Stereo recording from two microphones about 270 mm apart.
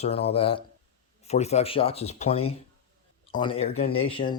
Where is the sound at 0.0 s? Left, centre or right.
Left.